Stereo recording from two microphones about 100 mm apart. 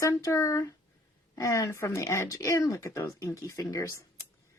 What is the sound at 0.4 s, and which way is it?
Speech, 30° left (ahead or behind).